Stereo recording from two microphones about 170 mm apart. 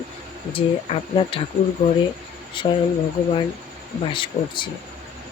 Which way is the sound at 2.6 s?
30° left (ahead or behind).